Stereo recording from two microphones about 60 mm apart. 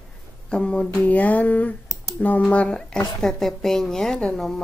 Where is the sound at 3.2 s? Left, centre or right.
Centre.